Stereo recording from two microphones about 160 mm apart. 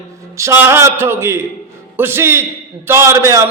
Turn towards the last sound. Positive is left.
turn(degrees=-20)  # may be behind; listen again after turning